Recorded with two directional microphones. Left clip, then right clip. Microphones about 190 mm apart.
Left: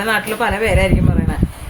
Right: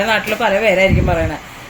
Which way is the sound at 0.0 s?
15° left (ahead or behind).